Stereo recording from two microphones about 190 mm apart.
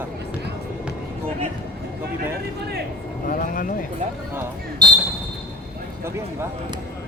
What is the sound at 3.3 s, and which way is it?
Speech, 45° left (ahead or behind).